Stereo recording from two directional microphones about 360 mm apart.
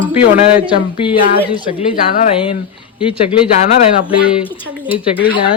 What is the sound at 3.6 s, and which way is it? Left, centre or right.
A woman's voice, centre.